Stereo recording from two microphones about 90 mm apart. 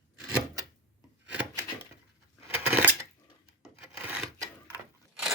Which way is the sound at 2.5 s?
20° right (ahead or behind).